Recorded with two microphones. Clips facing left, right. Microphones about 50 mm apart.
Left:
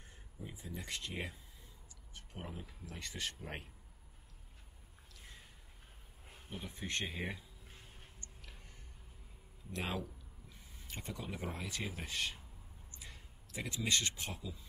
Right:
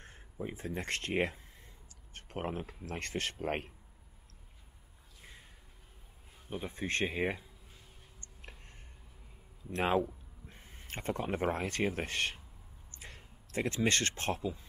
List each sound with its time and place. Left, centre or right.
0.0 s speech: right
6.5 s speech: right
8.2 s a sound: right
9.7 s speech: right